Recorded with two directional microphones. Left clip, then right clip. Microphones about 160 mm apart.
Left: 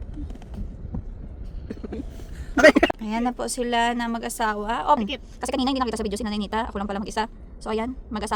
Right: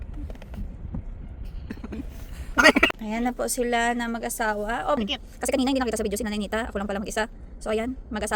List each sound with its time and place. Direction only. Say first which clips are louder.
2.7 s speech: left 1 dB; centre (ahead or behind)
5.4 s speech: even; 5° right (ahead or behind)